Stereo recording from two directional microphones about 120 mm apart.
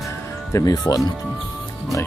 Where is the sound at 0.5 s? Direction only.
30° left (ahead or behind).